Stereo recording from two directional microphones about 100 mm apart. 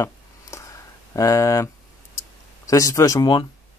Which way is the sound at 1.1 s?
30° left (ahead or behind).